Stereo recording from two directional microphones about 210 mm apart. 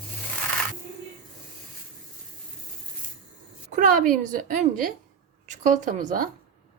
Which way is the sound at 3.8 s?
40° right (ahead or behind).